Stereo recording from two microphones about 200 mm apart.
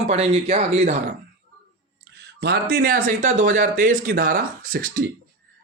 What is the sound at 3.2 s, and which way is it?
Speech, 40° right (ahead or behind).